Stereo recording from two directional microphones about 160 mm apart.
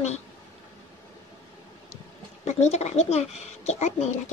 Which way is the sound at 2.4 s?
45° left (ahead or behind).